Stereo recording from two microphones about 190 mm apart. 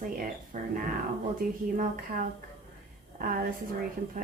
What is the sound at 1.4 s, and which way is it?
A woman's voice, 50° right (ahead or behind).